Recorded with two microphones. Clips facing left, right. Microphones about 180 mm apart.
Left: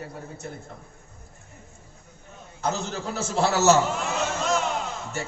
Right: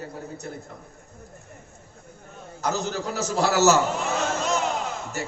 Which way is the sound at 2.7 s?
35° right (ahead or behind).